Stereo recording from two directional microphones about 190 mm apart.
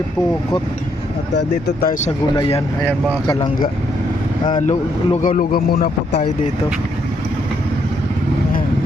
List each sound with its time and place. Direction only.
1.4 s speech: 65° left (ahead or behind)
2.3 s speech: 25° left (ahead or behind)
4.6 s speech: 35° left (ahead or behind); by 6.2 s 55° left (ahead or behind)